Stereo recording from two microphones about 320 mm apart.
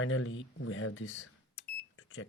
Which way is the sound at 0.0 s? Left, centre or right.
Left.